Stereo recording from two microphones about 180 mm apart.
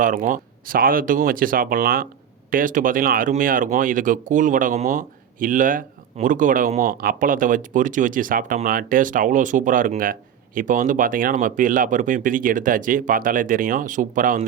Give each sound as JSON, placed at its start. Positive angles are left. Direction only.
{"t": 0.0, "sound": "speech", "side_deg": -45}